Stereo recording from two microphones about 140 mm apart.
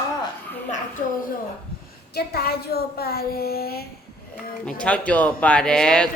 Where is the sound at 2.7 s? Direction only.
90° left.